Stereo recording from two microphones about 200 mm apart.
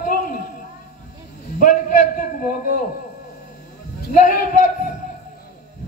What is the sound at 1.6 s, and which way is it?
Speech, 40° left (ahead or behind).